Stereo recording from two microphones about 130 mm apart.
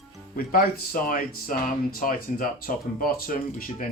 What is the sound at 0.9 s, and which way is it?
Speech, 90° left.